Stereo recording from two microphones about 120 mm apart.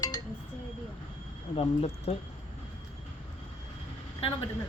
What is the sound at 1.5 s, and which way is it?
Speech, 60° left (ahead or behind).